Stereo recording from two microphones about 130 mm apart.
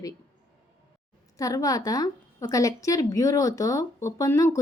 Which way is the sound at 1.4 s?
25° left (ahead or behind).